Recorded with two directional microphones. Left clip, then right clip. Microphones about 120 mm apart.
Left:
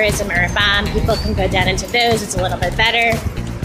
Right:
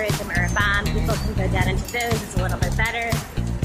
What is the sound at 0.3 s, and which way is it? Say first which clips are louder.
Music: left 6 dB; 30° left (ahead or behind).